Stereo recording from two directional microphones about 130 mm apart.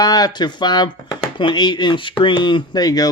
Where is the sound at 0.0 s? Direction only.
30° left (ahead or behind).